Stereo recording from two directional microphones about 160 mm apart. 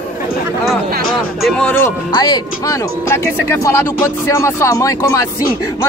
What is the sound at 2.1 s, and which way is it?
Speech, 25° left (ahead or behind).